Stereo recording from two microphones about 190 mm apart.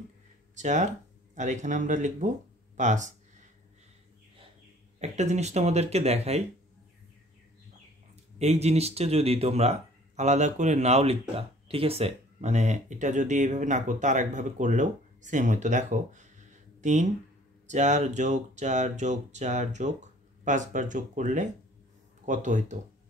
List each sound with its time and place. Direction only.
0.6 s speech: 40° right (ahead or behind)
2.8 s a sound: 40° right (ahead or behind)
4.9 s speech: 35° right (ahead or behind)
8.4 s speech: 35° right (ahead or behind)